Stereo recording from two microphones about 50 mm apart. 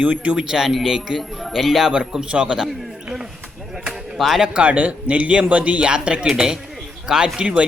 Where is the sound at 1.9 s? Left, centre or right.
Centre.